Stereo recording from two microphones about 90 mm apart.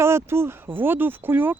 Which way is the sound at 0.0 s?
30° right (ahead or behind).